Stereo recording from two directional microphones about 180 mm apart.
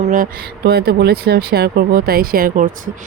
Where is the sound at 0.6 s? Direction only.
60° right (ahead or behind).